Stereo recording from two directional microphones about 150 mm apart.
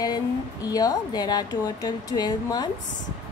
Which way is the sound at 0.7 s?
25° left (ahead or behind).